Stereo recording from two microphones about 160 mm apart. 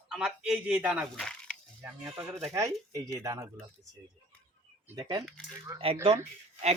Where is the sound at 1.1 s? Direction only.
5° left (ahead or behind).